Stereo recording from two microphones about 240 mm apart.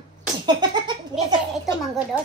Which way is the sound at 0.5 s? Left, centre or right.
Centre.